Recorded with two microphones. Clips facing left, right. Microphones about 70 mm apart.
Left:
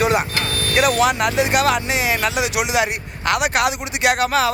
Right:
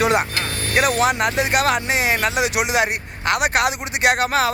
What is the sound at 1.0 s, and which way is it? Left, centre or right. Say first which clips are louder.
Speech: left 1 dB; right.